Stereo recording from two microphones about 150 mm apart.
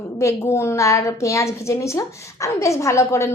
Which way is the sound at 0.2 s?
20° left (ahead or behind).